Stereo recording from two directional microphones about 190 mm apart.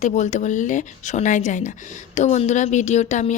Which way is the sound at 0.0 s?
40° left (ahead or behind).